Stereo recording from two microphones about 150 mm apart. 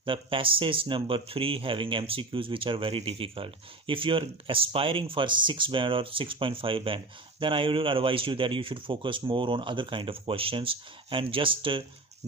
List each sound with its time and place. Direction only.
0.0 s speech: 35° right (ahead or behind)